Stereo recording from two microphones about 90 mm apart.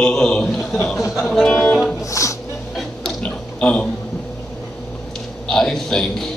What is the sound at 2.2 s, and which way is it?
Music, 35° left (ahead or behind).